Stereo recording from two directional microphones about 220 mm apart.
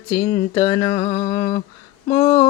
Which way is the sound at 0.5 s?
20° left (ahead or behind).